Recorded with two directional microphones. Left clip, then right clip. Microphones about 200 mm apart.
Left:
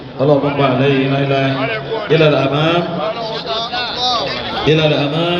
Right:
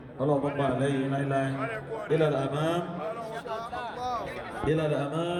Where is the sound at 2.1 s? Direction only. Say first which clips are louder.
Left 14 dB; 25° right (ahead or behind).